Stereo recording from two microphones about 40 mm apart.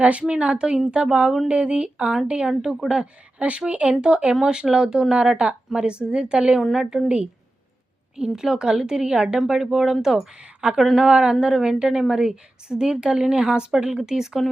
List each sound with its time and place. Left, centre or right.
0.0 s a woman's voice: right
2.5 s a woman's voice: centre; by 3.9 s right
4.0 s a woman's voice: right
6.6 s a woman's voice: centre
8.4 s a woman's voice: centre
11.1 s a woman's voice: centre
11.5 s a woman's voice: centre